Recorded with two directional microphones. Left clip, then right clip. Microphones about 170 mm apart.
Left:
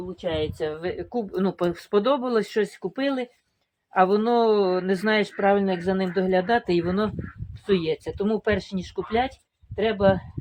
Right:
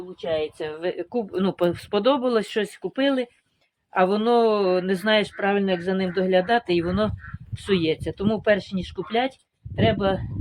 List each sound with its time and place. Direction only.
0.2 s speech: 30° right (ahead or behind)
0.6 s speech: 50° right (ahead or behind)